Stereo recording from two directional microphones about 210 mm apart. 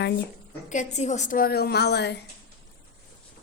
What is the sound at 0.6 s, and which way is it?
A woman's voice, 35° left (ahead or behind).